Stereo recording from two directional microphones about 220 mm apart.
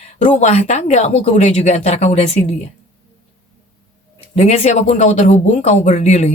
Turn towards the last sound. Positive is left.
turn(degrees=30)  # may be behind; listen again after turning